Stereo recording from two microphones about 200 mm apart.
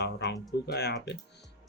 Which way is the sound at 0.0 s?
55° left (ahead or behind).